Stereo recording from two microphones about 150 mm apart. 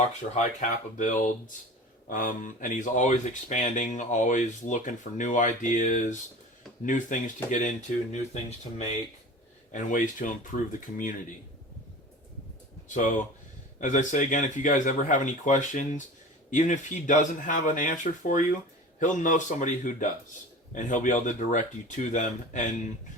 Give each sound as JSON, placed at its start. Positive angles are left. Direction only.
{"t": 0.3, "sound": "speech", "side_deg": 55}
{"t": 9.7, "sound": "speech", "side_deg": 60}
{"t": 12.9, "sound": "speech", "side_deg": 55}